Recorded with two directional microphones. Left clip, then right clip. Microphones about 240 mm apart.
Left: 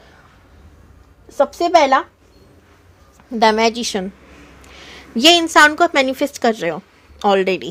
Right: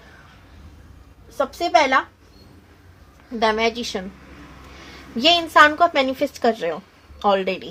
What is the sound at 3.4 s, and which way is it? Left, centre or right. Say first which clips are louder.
Speech: left 6 dB; left.